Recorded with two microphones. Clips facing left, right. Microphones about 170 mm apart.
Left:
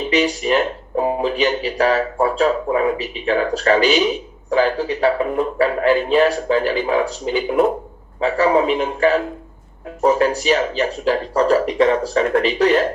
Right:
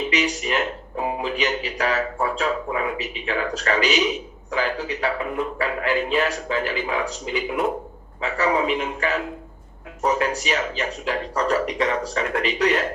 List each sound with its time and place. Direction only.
0.1 s a man's voice: 30° left (ahead or behind)